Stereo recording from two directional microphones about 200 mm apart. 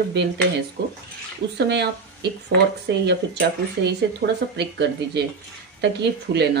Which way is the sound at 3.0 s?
60° right (ahead or behind).